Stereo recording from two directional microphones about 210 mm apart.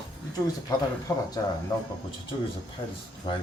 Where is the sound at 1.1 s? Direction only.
15° left (ahead or behind).